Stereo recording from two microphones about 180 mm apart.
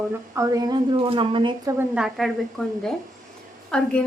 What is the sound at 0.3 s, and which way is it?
A woman's voice, 20° right (ahead or behind).